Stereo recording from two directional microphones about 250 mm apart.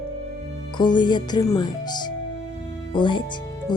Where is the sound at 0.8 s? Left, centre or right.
Centre.